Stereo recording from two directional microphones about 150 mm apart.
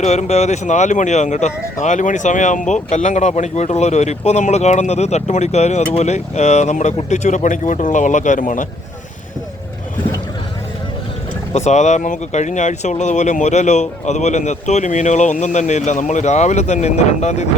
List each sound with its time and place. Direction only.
0.0 s a man's voice: 45° left (ahead or behind)
11.5 s speech: 50° left (ahead or behind)